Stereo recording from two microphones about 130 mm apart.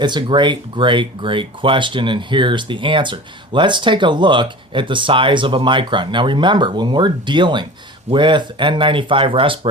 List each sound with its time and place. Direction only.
0.0 s speech: 35° right (ahead or behind)